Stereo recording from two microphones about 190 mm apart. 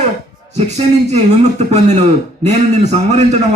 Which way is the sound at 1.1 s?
35° right (ahead or behind).